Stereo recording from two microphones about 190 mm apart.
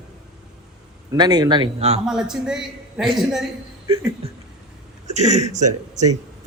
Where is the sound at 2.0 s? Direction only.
5° right (ahead or behind).